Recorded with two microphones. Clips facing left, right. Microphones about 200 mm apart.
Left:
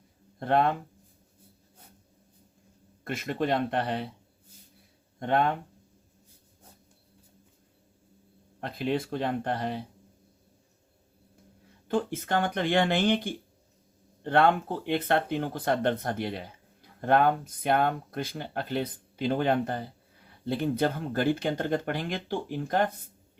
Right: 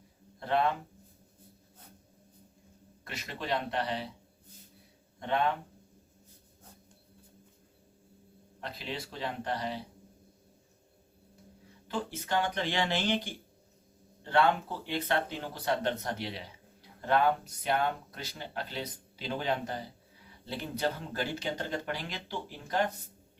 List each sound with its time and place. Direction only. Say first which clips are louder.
0.3 s speech: left 4 dB; 50° left (ahead or behind)
3.0 s speech: left 11 dB; 50° left (ahead or behind)
5.2 s speech: left 4 dB; 50° left (ahead or behind)
8.6 s speech: left 10 dB; 55° left (ahead or behind)
11.9 s speech: left 6 dB; 50° left (ahead or behind)